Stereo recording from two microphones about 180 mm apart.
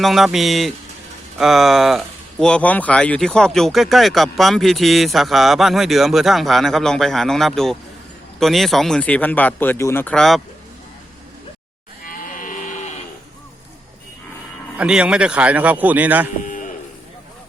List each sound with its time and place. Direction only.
0.0 s speech: centre (ahead or behind)
12.0 s sheep: 50° left (ahead or behind)
14.8 s a man's voice: 5° right (ahead or behind)
16.4 s livestock: 45° left (ahead or behind)